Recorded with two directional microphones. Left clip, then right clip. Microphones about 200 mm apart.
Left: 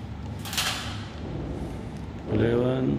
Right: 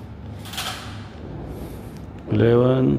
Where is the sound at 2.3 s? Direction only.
50° right (ahead or behind).